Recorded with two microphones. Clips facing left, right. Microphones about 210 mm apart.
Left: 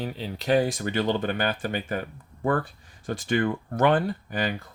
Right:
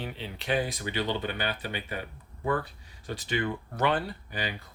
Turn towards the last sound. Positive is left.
turn(degrees=50)  # may be behind; listen again after turning